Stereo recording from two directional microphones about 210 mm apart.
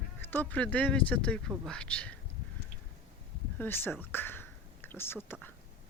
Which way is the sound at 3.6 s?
10° left (ahead or behind).